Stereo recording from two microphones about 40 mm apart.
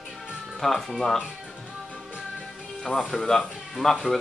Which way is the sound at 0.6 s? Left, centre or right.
Centre.